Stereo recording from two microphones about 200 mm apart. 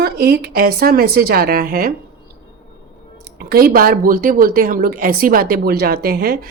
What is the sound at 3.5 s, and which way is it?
Speech, 50° right (ahead or behind).